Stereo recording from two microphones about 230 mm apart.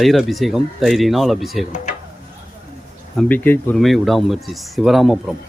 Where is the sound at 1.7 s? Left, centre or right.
Left.